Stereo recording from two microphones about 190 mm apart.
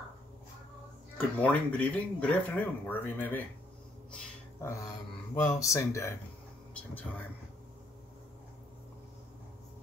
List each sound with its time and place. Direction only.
1.1 s speech: 10° left (ahead or behind)
4.1 s a sound: 15° left (ahead or behind)
5.6 s speech: 15° left (ahead or behind)